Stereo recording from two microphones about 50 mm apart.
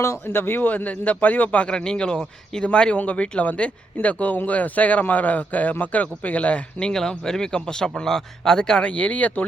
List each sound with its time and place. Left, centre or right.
0.3 s a man's voice: left
1.7 s a man's voice: centre
6.7 s speech: centre
8.8 s speech: left